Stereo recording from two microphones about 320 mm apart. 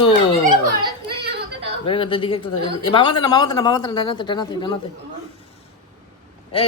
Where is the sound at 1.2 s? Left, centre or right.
Right.